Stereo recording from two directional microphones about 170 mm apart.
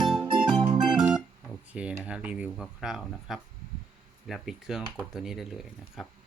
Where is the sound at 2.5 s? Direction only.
5° right (ahead or behind).